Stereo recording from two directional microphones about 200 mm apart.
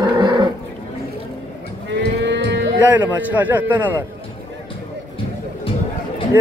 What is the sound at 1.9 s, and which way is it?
Livestock, 60° right (ahead or behind).